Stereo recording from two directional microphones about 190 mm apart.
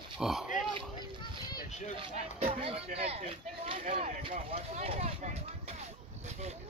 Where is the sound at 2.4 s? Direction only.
30° right (ahead or behind).